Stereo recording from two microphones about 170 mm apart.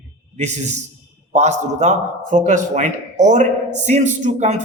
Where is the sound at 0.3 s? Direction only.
40° right (ahead or behind).